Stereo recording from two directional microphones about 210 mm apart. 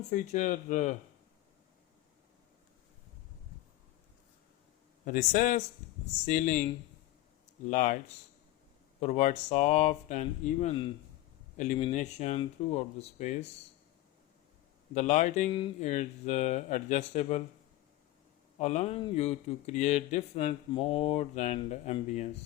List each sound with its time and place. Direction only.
0.1 s speech: 35° left (ahead or behind)
5.0 s speech: 40° left (ahead or behind)
7.7 s speech: 35° left (ahead or behind)
9.0 s speech: 35° left (ahead or behind)
14.9 s speech: 35° left (ahead or behind)
18.6 s speech: 30° left (ahead or behind)